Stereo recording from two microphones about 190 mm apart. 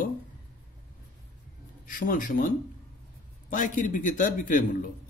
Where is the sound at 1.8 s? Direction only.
45° left (ahead or behind).